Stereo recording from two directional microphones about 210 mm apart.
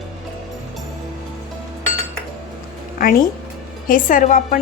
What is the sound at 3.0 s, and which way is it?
Speech, 40° left (ahead or behind).